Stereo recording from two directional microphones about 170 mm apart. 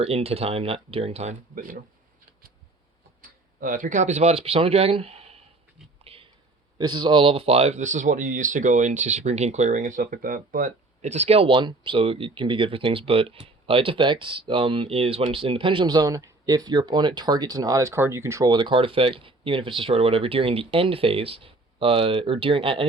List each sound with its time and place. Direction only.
0.0 s speech: 35° right (ahead or behind)
3.2 s speech: 55° right (ahead or behind); by 5.4 s 35° right (ahead or behind)
6.1 s whispering: 35° right (ahead or behind)
6.7 s speech: 25° right (ahead or behind)